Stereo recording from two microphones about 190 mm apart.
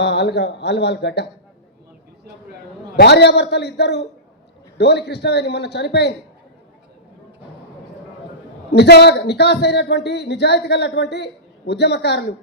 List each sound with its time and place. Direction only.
0.0 s speech: 60° left (ahead or behind)
2.9 s speech: 60° left (ahead or behind)
8.7 s speech: 60° left (ahead or behind)